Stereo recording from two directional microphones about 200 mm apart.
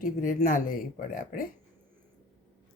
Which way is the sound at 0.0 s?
45° left (ahead or behind).